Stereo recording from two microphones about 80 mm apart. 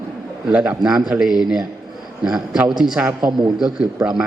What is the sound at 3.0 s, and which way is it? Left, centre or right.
Speech, right.